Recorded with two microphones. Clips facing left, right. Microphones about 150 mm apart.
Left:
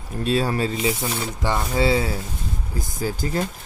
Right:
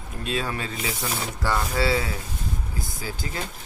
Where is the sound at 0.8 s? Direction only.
25° left (ahead or behind).